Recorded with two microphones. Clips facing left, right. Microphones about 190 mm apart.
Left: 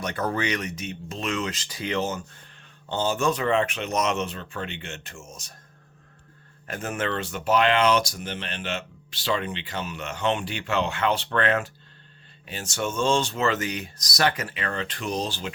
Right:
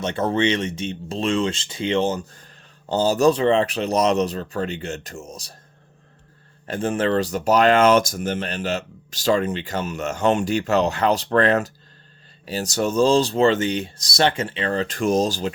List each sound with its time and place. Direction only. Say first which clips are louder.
0.0 s speech: right 6 dB; 25° right (ahead or behind)
6.7 s speech: right 8 dB; 30° right (ahead or behind)